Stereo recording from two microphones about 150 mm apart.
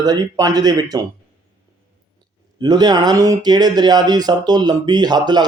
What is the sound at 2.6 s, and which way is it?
Speech, 25° right (ahead or behind).